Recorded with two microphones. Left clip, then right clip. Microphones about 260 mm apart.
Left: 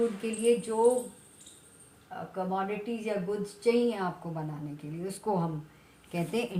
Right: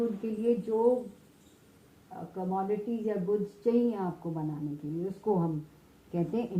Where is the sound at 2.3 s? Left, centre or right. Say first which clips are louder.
Left 1 dB; left.